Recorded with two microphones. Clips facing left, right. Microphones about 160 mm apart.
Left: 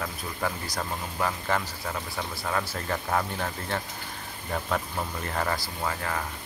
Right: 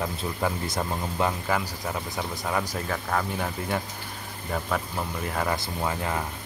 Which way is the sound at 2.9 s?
Centre (ahead or behind).